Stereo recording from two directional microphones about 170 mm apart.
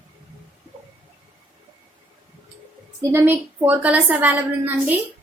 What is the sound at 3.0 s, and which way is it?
A woman's voice, 15° right (ahead or behind).